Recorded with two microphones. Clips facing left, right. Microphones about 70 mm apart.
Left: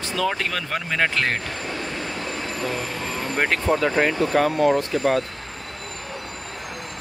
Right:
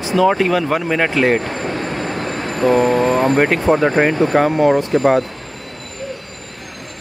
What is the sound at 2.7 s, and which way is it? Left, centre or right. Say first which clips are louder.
Speech: right 15 dB; right.